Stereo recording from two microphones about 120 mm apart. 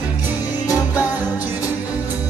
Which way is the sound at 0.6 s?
25° left (ahead or behind).